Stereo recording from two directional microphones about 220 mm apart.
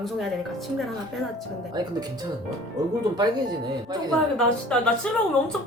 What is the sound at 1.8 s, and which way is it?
Speech, 20° right (ahead or behind).